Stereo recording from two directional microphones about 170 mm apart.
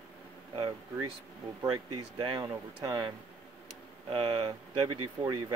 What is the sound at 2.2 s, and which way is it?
Speech, 25° right (ahead or behind).